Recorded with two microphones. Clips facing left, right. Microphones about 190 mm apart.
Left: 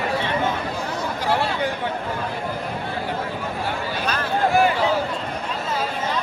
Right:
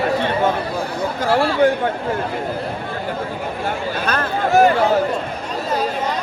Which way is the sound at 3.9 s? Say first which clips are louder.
Right 2 dB; 50° right (ahead or behind).